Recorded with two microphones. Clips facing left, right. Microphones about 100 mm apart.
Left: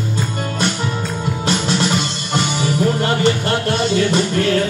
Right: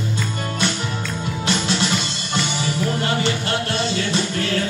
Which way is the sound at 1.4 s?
45° left (ahead or behind).